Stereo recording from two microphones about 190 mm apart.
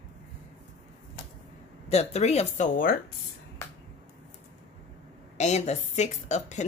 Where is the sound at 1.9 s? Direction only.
35° left (ahead or behind).